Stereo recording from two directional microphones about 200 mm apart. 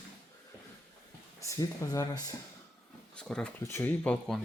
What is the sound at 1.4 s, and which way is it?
Speech, 15° left (ahead or behind).